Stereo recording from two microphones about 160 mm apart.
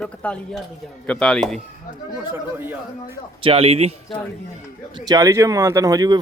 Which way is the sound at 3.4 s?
35° right (ahead or behind).